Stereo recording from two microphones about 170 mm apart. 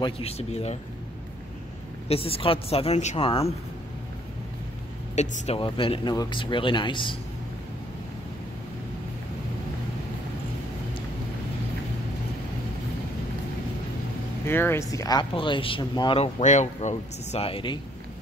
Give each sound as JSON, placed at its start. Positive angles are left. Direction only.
{"t": 0.0, "sound": "a woman's voice", "side_deg": 35}
{"t": 2.0, "sound": "a woman's voice", "side_deg": 35}
{"t": 5.1, "sound": "speech", "side_deg": 45}
{"t": 5.6, "sound": "speech", "side_deg": 30}
{"t": 14.4, "sound": "speech", "side_deg": 15}